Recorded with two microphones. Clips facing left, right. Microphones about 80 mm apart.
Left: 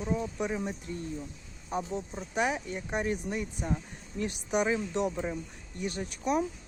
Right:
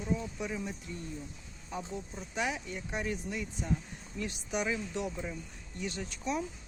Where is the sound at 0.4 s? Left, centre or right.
Left.